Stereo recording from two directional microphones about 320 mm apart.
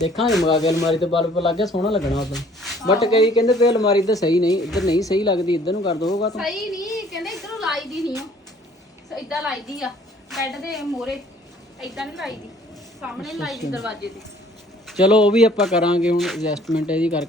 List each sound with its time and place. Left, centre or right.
0.0 s speech: centre
0.3 s speech: centre
2.1 s speech: centre
2.8 s speech: centre
4.6 s speech: centre
4.9 s speech: centre
6.3 s speech: centre
6.8 s a sound: centre
9.0 s a woman's voice: centre
14.8 s speech: centre